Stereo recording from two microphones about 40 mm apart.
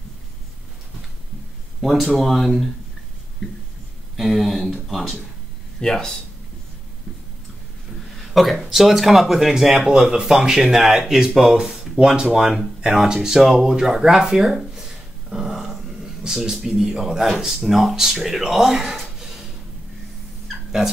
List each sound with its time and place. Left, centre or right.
1.8 s speech: centre
4.2 s speech: centre
5.8 s speech: centre
8.3 s speech: centre